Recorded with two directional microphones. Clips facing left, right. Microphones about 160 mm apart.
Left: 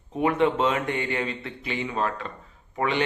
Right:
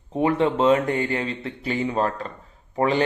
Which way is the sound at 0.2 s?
30° right (ahead or behind).